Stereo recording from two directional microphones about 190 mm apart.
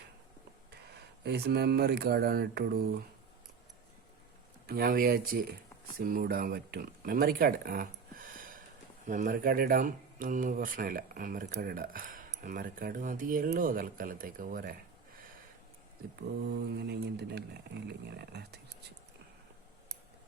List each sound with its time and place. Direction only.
1.2 s speech: 60° right (ahead or behind)
4.6 s speech: 50° right (ahead or behind)
8.3 s a sound: 45° right (ahead or behind)
9.0 s speech: 45° right (ahead or behind)
16.5 s speech: 60° right (ahead or behind)